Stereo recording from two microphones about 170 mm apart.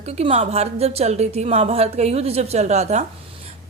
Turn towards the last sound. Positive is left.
turn(degrees=-40)  # may be behind; listen again after turning